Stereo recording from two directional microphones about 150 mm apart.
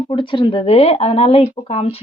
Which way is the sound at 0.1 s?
35° left (ahead or behind).